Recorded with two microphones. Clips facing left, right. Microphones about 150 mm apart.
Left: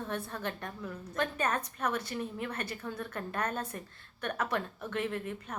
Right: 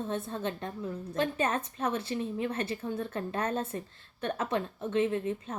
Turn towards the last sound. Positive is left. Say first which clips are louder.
# right 6 dB
turn(degrees=-20)  # may be behind; listen again after turning